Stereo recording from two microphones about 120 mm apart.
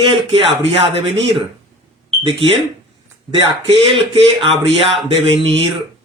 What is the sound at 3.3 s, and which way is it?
A man's voice, 45° right (ahead or behind).